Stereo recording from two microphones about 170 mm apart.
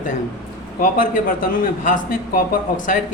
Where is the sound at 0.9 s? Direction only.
55° left (ahead or behind).